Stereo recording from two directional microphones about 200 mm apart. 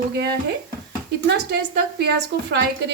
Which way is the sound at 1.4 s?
55° right (ahead or behind).